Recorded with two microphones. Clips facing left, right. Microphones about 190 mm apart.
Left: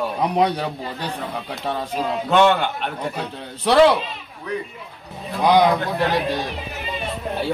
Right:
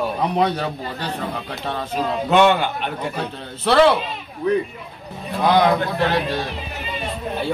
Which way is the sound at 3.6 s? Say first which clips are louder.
Left 1 dB; 15° left (ahead or behind).